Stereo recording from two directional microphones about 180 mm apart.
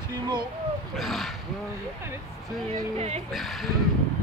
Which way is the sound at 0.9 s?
Centre (ahead or behind).